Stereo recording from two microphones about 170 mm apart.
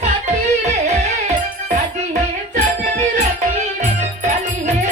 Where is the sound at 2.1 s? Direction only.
45° right (ahead or behind).